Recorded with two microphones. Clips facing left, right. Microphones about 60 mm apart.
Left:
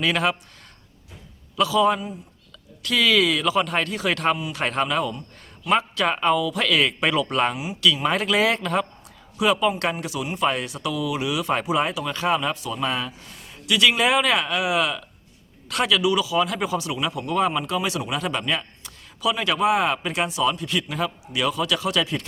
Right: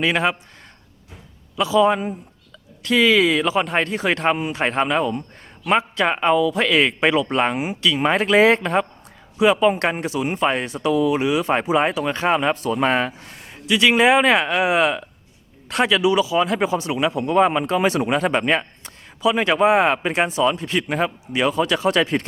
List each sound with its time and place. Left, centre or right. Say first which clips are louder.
0.0 s speech: right 2 dB; right
1.5 s speech: right 2 dB; right
2.8 s speech: right 4 dB; right
7.5 s speech: right 6 dB; right
8.0 s speech: right 9 dB; right
13.7 s speech: right 4 dB; right